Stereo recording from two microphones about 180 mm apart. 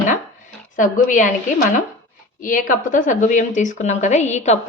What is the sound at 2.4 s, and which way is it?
A woman's voice, 45° left (ahead or behind).